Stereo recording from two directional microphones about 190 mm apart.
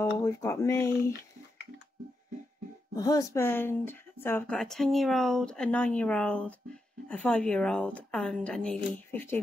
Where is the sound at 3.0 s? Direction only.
20° left (ahead or behind).